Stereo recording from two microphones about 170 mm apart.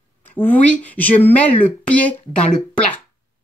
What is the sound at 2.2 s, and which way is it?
Speech, 45° left (ahead or behind).